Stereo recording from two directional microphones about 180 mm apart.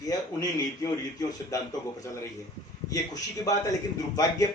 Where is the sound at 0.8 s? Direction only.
20° left (ahead or behind).